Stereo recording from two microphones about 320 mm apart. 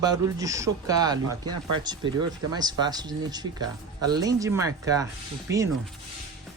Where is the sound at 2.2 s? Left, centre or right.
Right.